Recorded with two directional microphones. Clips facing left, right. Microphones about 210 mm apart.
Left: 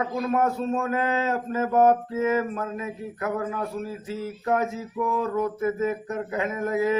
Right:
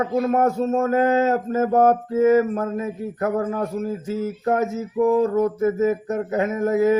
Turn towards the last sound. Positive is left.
turn(degrees=-40)  # may be behind; listen again after turning